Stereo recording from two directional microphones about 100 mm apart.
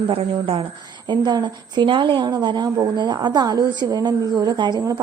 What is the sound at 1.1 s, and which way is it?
A woman's voice, 45° right (ahead or behind).